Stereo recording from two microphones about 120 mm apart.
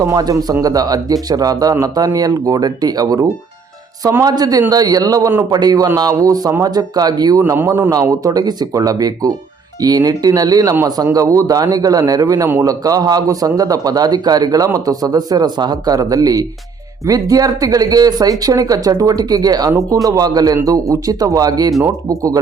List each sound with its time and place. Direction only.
0.0 s speech: 30° right (ahead or behind)